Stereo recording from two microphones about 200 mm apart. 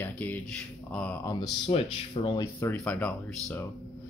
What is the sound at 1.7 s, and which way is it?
Speech, 25° left (ahead or behind).